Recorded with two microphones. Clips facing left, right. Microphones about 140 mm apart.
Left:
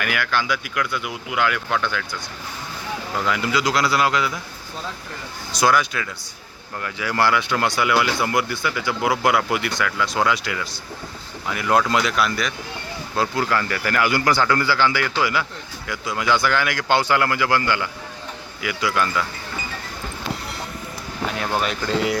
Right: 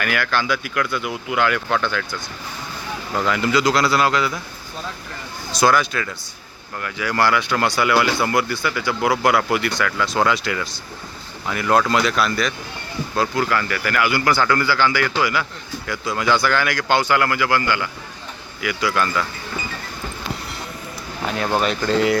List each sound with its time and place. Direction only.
0.0 s speech: 10° left (ahead or behind)
3.2 s speech: 10° left (ahead or behind)
5.5 s speech: 15° left (ahead or behind)
6.8 s speech: 25° left (ahead or behind)
13.1 s speech: 25° left (ahead or behind)
21.6 s speech: 5° left (ahead or behind)